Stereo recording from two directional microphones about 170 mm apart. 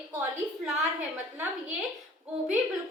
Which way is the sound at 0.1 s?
10° right (ahead or behind).